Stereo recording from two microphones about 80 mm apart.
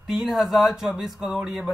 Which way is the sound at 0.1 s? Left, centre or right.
Centre.